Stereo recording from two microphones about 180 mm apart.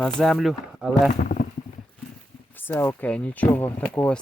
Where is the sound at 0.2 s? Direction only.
Centre (ahead or behind).